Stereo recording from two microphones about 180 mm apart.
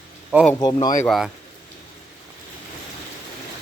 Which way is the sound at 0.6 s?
25° left (ahead or behind).